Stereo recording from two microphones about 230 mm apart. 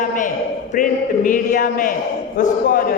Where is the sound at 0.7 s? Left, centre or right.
Left.